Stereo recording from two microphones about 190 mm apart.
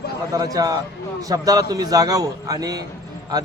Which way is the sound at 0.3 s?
20° right (ahead or behind).